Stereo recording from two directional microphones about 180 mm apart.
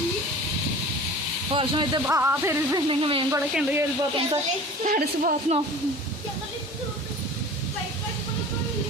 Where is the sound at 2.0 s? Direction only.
10° right (ahead or behind).